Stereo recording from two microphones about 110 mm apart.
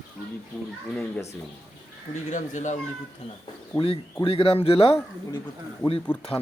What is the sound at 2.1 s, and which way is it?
Speech, 90° left.